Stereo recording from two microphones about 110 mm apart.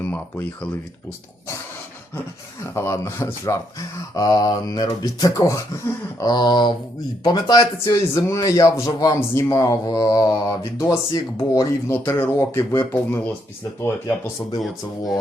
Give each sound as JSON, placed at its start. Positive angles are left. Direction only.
{"t": 0.0, "sound": "speech", "side_deg": 15}
{"t": 2.7, "sound": "speech", "side_deg": 25}
{"t": 14.6, "sound": "speech", "side_deg": 0}